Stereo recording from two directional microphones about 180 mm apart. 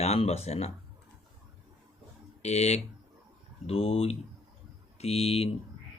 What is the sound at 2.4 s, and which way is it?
Speech, 35° left (ahead or behind).